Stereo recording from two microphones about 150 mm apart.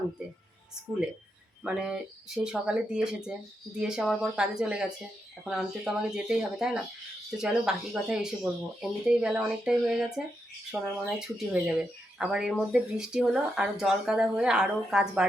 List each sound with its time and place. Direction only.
1.6 s speech: 5° right (ahead or behind)